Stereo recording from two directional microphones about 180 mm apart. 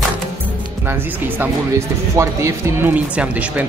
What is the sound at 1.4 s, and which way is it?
Speech, 15° right (ahead or behind).